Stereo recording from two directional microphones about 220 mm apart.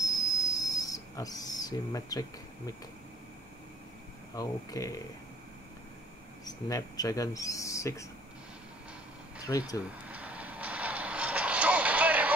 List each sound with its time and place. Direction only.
0.0 s whistle: 15° left (ahead or behind)
4.4 s speech: 15° left (ahead or behind)
6.4 s speech: 15° left (ahead or behind)
9.5 s speech: 15° left (ahead or behind)
9.8 s vehicle: 5° right (ahead or behind)